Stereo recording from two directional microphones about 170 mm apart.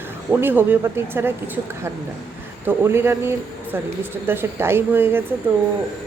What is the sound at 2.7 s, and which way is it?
Speech, 15° right (ahead or behind).